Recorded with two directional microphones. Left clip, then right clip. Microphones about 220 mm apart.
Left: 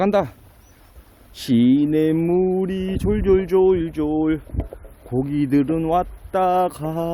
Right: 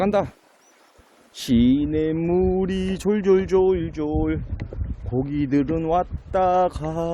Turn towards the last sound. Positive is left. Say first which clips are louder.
# left 1 dB
turn(degrees=5)  # may be behind; listen again after turning